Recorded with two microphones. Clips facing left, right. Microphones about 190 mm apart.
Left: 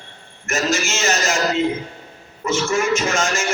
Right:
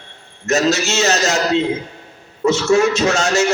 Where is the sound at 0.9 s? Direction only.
70° right (ahead or behind).